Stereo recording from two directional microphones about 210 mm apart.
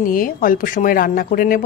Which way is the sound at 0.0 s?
40° left (ahead or behind).